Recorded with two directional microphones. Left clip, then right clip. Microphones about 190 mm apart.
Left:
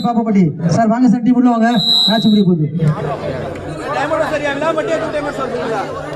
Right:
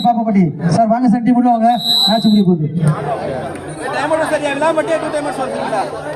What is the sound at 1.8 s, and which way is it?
Speech, 45° right (ahead or behind).